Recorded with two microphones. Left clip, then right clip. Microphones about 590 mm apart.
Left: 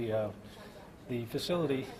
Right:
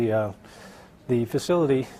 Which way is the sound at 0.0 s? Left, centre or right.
Right.